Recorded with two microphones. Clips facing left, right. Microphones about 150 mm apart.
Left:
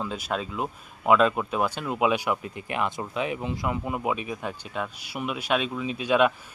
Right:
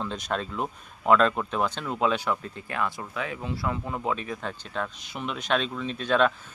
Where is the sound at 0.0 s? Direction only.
5° left (ahead or behind).